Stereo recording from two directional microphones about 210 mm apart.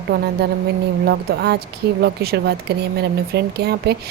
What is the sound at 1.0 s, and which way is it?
Speech, 50° right (ahead or behind).